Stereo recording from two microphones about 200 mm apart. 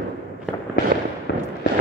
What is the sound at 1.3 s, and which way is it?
Fireworks, 55° left (ahead or behind).